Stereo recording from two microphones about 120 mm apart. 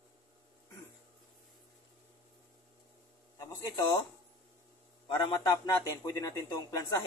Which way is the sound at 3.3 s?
35° left (ahead or behind).